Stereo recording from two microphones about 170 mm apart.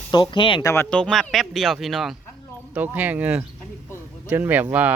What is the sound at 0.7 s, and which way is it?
Speech, 10° left (ahead or behind).